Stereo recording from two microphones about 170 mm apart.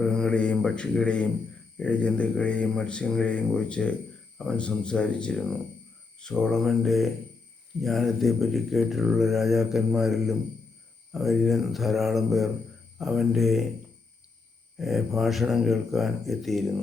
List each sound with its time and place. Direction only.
0.0 s speech: 5° left (ahead or behind)
14.8 s speech: centre (ahead or behind)